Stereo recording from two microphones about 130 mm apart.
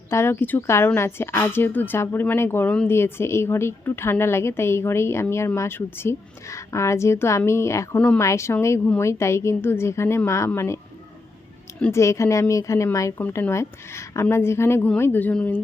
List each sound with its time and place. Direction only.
0.1 s speech: 20° left (ahead or behind)
7.9 s speech: 10° left (ahead or behind)
8.2 s speech: 20° left (ahead or behind)
11.9 s speech: 20° left (ahead or behind)